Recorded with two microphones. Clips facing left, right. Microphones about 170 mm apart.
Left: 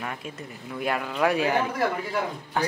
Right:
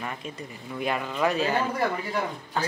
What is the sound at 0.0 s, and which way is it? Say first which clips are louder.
A woman's voice: even; centre (ahead or behind).